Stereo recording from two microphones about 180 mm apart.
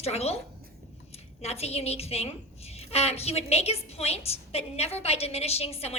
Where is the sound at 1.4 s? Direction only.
35° left (ahead or behind).